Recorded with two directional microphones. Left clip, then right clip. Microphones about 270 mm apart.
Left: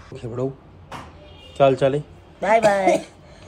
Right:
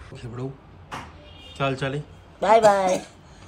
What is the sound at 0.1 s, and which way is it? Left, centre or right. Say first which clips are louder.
Speech: left 8 dB; centre.